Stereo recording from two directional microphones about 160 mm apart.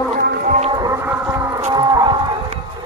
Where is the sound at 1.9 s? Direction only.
25° right (ahead or behind).